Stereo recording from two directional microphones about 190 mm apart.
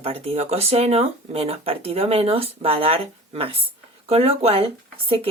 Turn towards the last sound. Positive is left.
turn(degrees=-30)  # may be behind; listen again after turning